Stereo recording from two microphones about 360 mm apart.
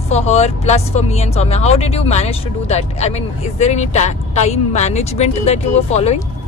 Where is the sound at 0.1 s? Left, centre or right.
Centre.